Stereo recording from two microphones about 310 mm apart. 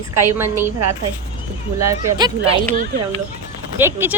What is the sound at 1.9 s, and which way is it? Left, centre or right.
Speech, centre.